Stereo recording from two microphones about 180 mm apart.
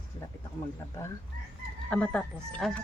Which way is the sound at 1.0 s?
15° left (ahead or behind).